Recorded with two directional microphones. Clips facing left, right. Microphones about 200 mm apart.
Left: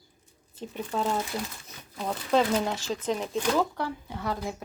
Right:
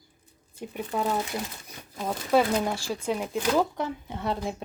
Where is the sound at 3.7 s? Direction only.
20° right (ahead or behind).